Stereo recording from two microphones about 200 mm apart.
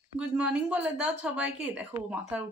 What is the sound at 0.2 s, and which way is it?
A woman's voice, 5° right (ahead or behind).